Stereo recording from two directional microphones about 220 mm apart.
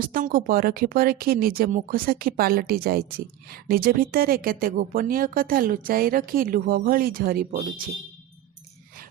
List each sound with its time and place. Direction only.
0.0 s speech: 40° right (ahead or behind)